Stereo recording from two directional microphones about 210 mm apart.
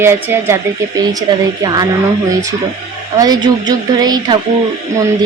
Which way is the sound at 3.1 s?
20° right (ahead or behind).